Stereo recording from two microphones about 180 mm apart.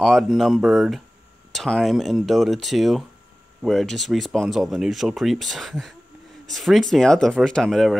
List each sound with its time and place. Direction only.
0.0 s speech: centre (ahead or behind)